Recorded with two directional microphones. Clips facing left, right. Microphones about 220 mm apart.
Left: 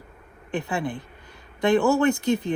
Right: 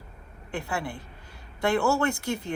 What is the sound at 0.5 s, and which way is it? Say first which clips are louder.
A woman's voice: left 5 dB; 20° left (ahead or behind).